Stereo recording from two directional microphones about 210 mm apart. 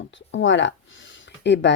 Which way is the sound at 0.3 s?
60° left (ahead or behind).